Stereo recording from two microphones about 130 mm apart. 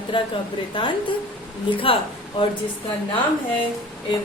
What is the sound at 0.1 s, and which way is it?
A woman's voice, 40° left (ahead or behind).